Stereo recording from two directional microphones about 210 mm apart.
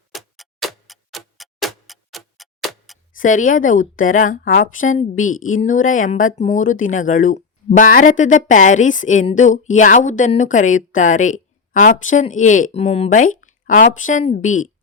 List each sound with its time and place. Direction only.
0.1 s tick-tock: centre (ahead or behind)
3.2 s speech: 40° left (ahead or behind)
5.3 s speech: 75° left (ahead or behind)
5.5 s speech: 40° left (ahead or behind)